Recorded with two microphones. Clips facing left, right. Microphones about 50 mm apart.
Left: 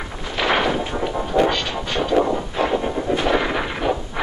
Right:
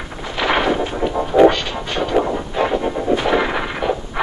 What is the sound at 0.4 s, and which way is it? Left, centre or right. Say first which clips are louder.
Artillery fire: right 2 dB; centre.